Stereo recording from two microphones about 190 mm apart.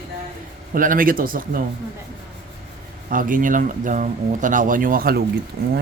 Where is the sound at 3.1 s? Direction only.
45° right (ahead or behind).